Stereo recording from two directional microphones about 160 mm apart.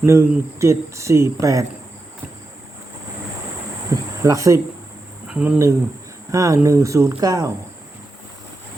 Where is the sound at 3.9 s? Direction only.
20° right (ahead or behind).